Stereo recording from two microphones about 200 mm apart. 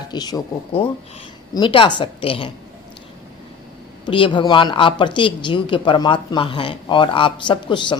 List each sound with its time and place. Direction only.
0.1 s speech: 20° left (ahead or behind)
4.0 s speech: 25° left (ahead or behind)